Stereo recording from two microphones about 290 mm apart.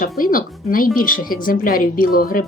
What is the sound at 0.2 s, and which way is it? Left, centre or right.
Speech, left.